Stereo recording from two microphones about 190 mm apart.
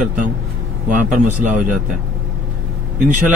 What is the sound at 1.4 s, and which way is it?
Speech, 40° right (ahead or behind).